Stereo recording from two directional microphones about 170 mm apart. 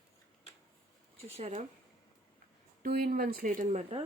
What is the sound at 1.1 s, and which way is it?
Speech, 35° right (ahead or behind).